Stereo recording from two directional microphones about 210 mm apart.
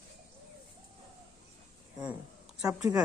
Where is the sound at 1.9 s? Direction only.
5° right (ahead or behind).